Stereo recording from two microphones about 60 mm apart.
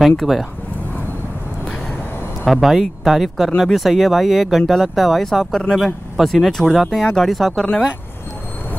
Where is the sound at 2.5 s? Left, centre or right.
Centre.